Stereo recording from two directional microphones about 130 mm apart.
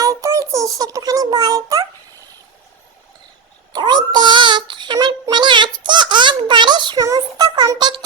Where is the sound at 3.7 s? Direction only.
35° right (ahead or behind).